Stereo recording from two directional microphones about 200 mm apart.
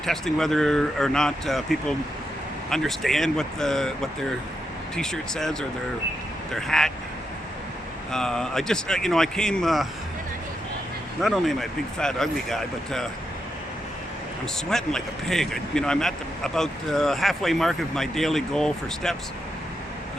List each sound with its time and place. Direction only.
0.0 s speech: centre (ahead or behind)
8.1 s speech: 5° left (ahead or behind)
11.2 s speech: centre (ahead or behind)
14.7 s speech: centre (ahead or behind)